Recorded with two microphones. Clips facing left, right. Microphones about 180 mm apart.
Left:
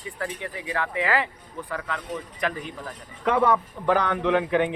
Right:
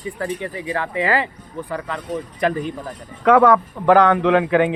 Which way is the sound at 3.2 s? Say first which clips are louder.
Right 8 dB; 90° right.